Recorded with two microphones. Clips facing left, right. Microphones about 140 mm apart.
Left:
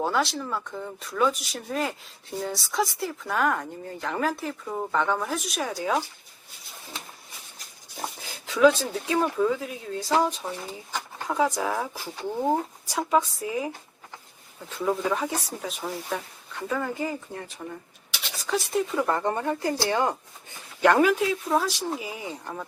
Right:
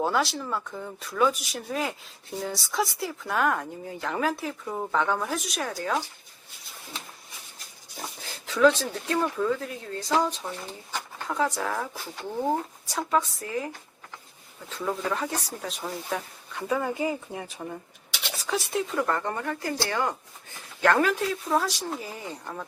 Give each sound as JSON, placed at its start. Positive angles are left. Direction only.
{"t": 0.0, "sound": "speech", "side_deg": 0}
{"t": 8.4, "sound": "speech", "side_deg": 10}
{"t": 14.7, "sound": "speech", "side_deg": 10}
{"t": 19.0, "sound": "speech", "side_deg": 20}